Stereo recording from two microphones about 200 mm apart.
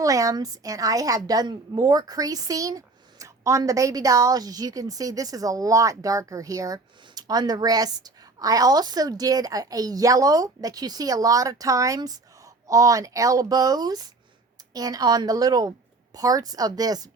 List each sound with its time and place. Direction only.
0.0 s a woman's voice: 15° right (ahead or behind)